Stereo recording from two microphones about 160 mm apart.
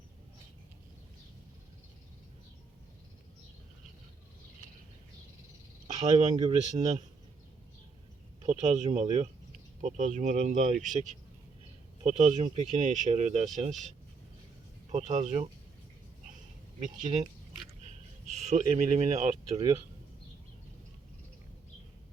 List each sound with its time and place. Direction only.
6.1 s speech: 50° right (ahead or behind)
6.3 s speech: 25° right (ahead or behind)
8.4 s speech: 50° right (ahead or behind)
14.8 s speech: 45° right (ahead or behind)
16.8 s speech: 50° right (ahead or behind)
18.4 s speech: 45° right (ahead or behind)